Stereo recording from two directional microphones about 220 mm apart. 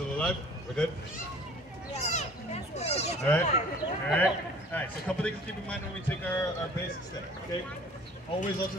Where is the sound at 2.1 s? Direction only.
30° left (ahead or behind).